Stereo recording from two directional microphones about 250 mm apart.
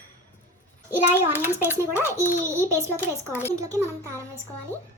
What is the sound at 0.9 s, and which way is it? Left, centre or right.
A child's voice, centre.